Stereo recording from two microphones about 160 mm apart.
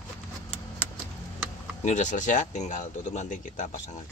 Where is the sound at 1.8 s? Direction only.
50° left (ahead or behind).